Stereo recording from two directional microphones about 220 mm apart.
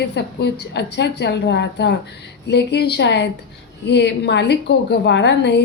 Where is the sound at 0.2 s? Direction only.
50° left (ahead or behind).